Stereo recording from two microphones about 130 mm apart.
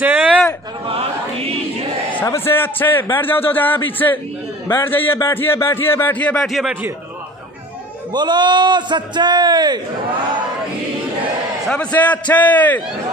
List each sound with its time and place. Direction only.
0.0 s a man's voice: 10° right (ahead or behind)
0.8 s chant: 50° right (ahead or behind)
2.2 s a man's voice: 20° left (ahead or behind); by 6.7 s centre (ahead or behind)
8.1 s a man's voice: 35° right (ahead or behind)
11.6 s a man's voice: 5° left (ahead or behind)